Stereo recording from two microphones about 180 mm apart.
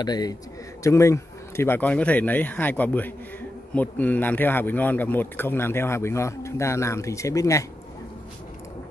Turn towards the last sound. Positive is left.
turn(degrees=15)  # may be behind; listen again after turning